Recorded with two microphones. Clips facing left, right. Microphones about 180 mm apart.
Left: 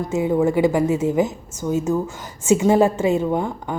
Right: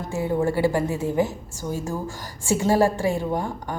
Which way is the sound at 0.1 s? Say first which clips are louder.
Left 4 dB; 15° left (ahead or behind).